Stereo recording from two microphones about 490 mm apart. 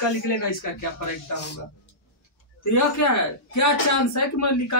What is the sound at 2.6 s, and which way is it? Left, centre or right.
Speech, left.